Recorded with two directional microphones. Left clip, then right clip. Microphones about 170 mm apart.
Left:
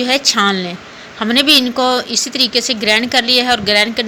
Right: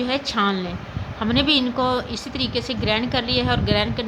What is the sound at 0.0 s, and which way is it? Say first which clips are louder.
A woman's voice: left 9 dB; 20° left (ahead or behind).